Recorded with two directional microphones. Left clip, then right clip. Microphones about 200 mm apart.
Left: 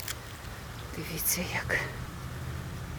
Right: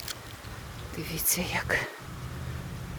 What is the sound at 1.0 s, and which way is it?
Speech, 15° right (ahead or behind).